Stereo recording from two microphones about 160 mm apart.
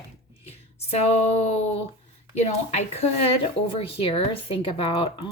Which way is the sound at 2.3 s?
40° left (ahead or behind).